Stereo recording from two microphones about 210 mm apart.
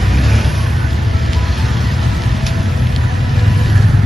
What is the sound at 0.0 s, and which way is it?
Vehicle, centre (ahead or behind).